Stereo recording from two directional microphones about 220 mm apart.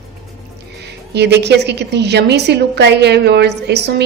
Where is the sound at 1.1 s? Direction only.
50° right (ahead or behind).